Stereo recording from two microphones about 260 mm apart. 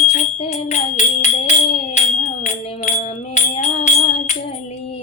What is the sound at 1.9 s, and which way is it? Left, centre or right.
Chirp tone, left.